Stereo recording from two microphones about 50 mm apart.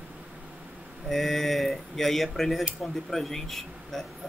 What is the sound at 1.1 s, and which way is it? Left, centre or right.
Speech, centre.